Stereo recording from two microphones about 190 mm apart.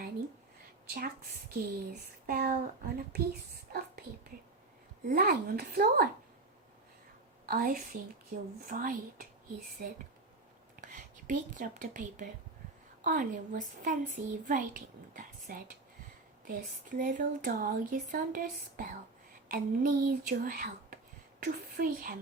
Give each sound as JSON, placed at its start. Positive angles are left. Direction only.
{"t": 0.9, "sound": "speech", "side_deg": -50}
{"t": 5.0, "sound": "speech", "side_deg": -50}
{"t": 7.4, "sound": "a woman's voice", "side_deg": -45}
{"t": 10.8, "sound": "speech", "side_deg": -40}